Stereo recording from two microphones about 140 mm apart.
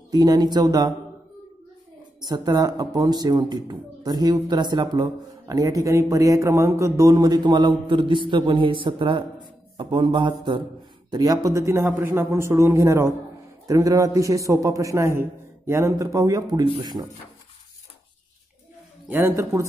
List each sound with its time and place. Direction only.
0.1 s speech: 30° right (ahead or behind)
2.2 s speech: 30° right (ahead or behind)
19.0 s a man's voice: 15° right (ahead or behind)